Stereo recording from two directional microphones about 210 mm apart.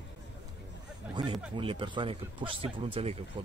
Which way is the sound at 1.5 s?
25° right (ahead or behind).